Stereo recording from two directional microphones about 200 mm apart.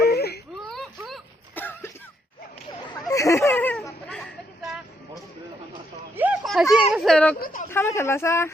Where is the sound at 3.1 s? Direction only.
15° left (ahead or behind).